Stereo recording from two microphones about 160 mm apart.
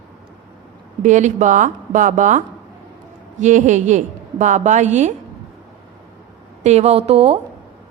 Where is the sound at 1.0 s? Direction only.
50° right (ahead or behind).